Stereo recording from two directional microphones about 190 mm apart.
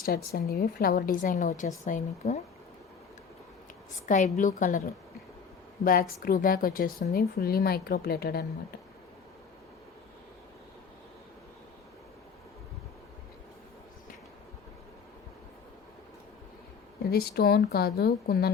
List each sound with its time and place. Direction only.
0.0 s a woman's voice: 50° left (ahead or behind)
4.0 s a woman's voice: 40° left (ahead or behind)
5.8 s a woman's voice: 50° left (ahead or behind)
17.1 s speech: 55° left (ahead or behind)